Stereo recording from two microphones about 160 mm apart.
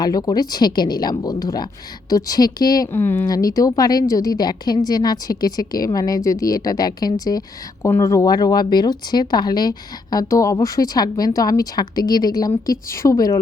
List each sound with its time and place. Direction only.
0.0 s speech: 25° left (ahead or behind)